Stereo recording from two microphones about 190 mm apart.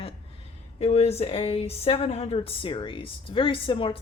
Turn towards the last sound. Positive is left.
turn(degrees=25)  # may be behind; listen again after turning